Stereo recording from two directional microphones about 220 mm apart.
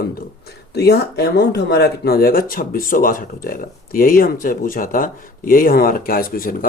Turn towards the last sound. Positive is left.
turn(degrees=40)  # may be behind; listen again after turning